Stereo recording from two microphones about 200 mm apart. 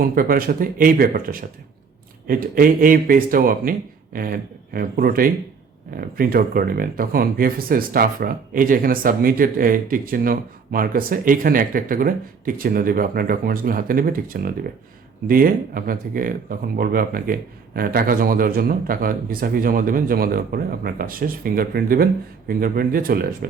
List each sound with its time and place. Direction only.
0.0 s speech: 45° right (ahead or behind)